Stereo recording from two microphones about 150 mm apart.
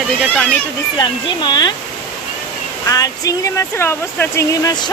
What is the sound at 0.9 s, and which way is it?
Speech, 30° left (ahead or behind).